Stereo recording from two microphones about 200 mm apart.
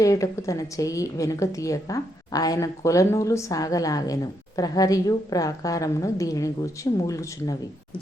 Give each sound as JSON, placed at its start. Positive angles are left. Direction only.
{"t": 0.0, "sound": "a woman's voice", "side_deg": 15}